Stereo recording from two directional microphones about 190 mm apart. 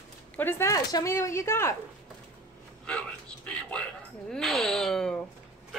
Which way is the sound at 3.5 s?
5° left (ahead or behind).